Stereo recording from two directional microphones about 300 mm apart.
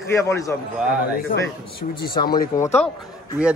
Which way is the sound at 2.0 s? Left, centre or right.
Left.